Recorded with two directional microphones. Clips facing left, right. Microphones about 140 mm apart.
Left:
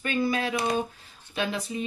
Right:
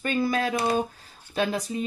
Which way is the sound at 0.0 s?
40° right (ahead or behind).